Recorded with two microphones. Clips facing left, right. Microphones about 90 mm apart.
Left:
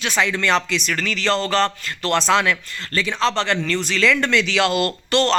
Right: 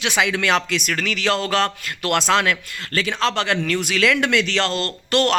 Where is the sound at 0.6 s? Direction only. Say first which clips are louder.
Even; 65° right (ahead or behind).